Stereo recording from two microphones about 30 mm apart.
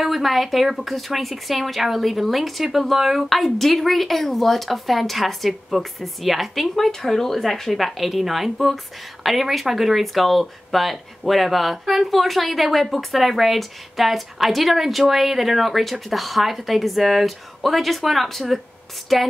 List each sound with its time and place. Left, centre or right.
0.0 s speech: centre
6.7 s speech: centre
7.7 s speech: centre